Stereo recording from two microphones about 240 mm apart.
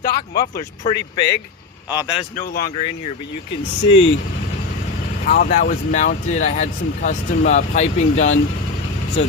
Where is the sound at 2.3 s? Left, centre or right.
Left.